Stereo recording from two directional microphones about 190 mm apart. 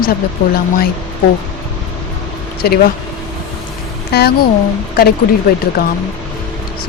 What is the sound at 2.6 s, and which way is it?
Speech, 55° left (ahead or behind).